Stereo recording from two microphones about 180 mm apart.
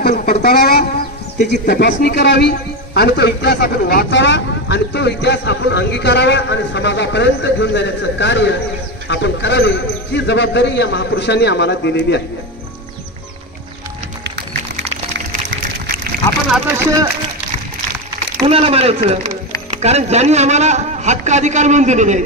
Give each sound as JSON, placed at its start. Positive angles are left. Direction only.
{"t": 0.0, "sound": "a sound", "side_deg": 60}
{"t": 1.5, "sound": "a man's voice", "side_deg": 65}
{"t": 16.7, "sound": "speech", "side_deg": -15}
{"t": 18.5, "sound": "a man's voice", "side_deg": -35}